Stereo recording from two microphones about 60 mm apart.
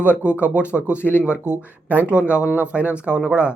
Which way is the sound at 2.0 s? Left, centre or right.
Right.